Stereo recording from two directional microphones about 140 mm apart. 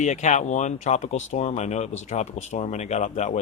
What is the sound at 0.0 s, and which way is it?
Speech, 60° left (ahead or behind).